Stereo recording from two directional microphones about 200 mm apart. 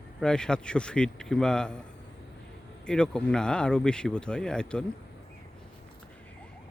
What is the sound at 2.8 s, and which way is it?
Speech, 5° left (ahead or behind).